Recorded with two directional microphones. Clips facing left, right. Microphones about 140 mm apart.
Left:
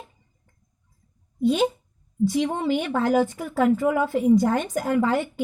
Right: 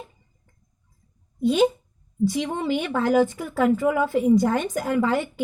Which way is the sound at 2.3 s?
50° left (ahead or behind).